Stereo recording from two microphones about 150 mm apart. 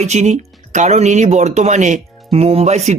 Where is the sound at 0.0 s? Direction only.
50° right (ahead or behind).